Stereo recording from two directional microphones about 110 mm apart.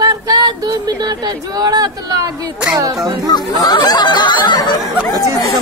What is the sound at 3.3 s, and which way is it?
Speech, 40° left (ahead or behind).